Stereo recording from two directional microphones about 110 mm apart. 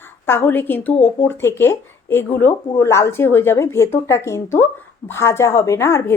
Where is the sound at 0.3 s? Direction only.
20° left (ahead or behind).